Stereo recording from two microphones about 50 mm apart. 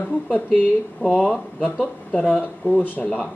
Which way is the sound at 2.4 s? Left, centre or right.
Left.